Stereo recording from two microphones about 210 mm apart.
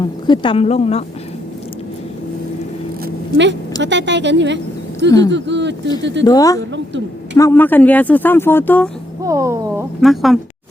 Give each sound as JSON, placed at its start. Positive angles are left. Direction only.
{"t": 0.0, "sound": "speech", "side_deg": 20}
{"t": 3.0, "sound": "zipper", "side_deg": -60}
{"t": 3.8, "sound": "speech", "side_deg": -55}
{"t": 6.2, "sound": "speech", "side_deg": 15}
{"t": 9.2, "sound": "a sound", "side_deg": -15}
{"t": 10.0, "sound": "speech", "side_deg": 0}